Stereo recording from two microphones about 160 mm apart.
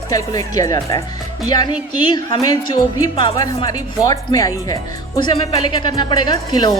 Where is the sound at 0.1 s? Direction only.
20° left (ahead or behind).